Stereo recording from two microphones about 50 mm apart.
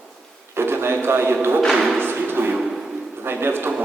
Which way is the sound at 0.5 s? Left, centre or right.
Right.